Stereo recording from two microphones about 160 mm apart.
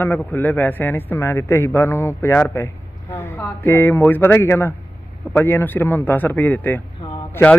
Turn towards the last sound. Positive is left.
turn(degrees=10)  # may be behind; listen again after turning